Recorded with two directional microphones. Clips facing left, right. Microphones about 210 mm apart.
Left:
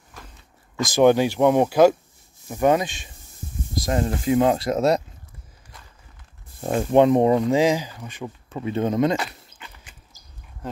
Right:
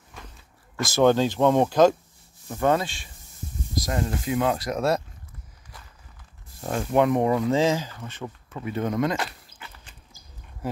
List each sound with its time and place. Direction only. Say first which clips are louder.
0.7 s speech: left 3 dB; 15° left (ahead or behind)
6.6 s speech: left 5 dB; 25° left (ahead or behind)
8.5 s speech: left 4 dB; 25° left (ahead or behind)
10.6 s speech: right 2 dB; 10° right (ahead or behind)